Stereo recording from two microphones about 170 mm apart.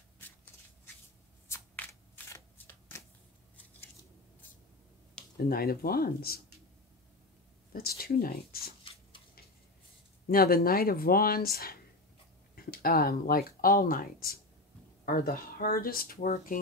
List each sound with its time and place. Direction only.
1.5 s shuffling cards: 15° left (ahead or behind)
5.4 s speech: 60° left (ahead or behind)
7.7 s speech: 65° left (ahead or behind)
10.3 s speech: 60° left (ahead or behind)